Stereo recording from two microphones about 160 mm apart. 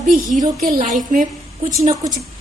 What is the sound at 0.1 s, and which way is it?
A woman's voice, 50° right (ahead or behind).